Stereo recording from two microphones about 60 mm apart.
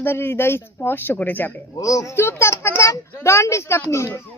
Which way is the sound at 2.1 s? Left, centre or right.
Left.